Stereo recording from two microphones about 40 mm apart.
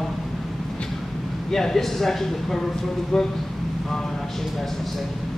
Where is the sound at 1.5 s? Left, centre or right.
Centre.